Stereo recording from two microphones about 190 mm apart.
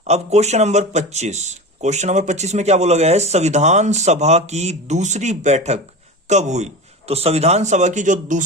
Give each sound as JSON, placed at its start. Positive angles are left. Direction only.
{"t": 0.1, "sound": "speech", "side_deg": -35}